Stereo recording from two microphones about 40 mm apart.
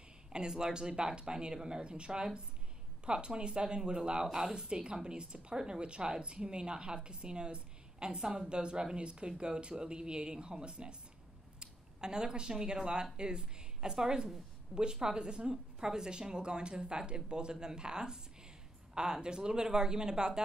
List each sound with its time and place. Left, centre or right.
0.3 s a woman's voice: centre